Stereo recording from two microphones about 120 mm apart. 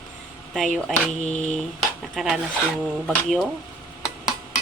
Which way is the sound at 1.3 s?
85° left.